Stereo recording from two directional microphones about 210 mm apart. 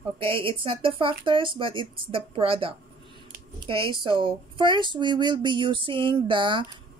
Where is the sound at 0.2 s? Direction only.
25° right (ahead or behind).